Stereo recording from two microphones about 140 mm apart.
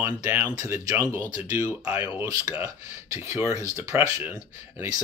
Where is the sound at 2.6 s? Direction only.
20° right (ahead or behind).